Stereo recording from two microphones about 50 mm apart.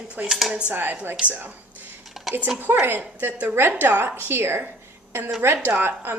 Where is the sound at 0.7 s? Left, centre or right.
Right.